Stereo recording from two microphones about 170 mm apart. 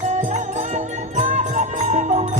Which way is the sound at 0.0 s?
45° right (ahead or behind).